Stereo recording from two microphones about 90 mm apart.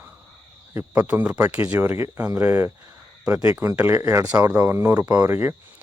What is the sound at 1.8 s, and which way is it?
Speech, 25° right (ahead or behind).